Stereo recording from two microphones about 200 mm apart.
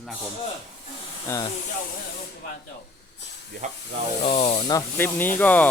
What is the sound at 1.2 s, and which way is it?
Speech, 15° left (ahead or behind).